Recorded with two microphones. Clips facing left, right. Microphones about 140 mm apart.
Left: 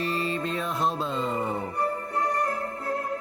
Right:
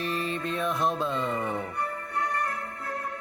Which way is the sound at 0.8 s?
30° left (ahead or behind).